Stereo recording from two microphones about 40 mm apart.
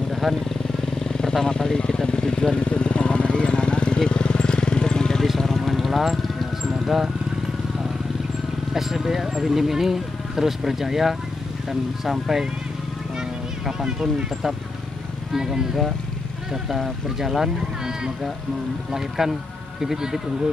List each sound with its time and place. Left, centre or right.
0.1 s vehicle: centre
1.3 s vehicle: centre
5.2 s vehicle: centre
8.7 s speech: centre
13.8 s speech: right
15.3 s speech: centre
17.6 s speech: centre